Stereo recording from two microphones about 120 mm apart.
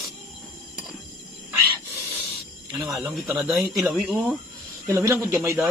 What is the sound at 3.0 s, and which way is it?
Speech, centre (ahead or behind).